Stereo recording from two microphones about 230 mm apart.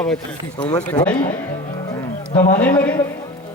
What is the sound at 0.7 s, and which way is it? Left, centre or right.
Speech, centre.